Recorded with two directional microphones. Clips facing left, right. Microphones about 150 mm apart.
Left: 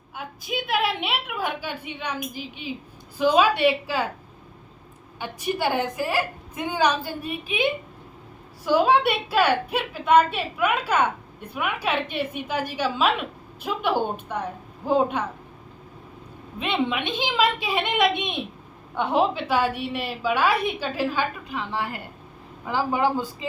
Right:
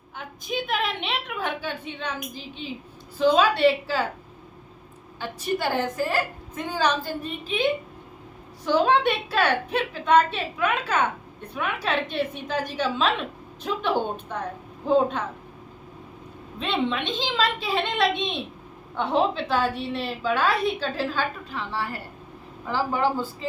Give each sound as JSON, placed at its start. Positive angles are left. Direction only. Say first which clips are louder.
{"t": 0.2, "sound": "a woman's voice", "louder": "even", "side_deg": 5}
{"t": 5.2, "sound": "a woman's voice", "louder": "left 1 dB", "side_deg": 15}
{"t": 16.6, "sound": "a woman's voice", "louder": "left 1 dB", "side_deg": 10}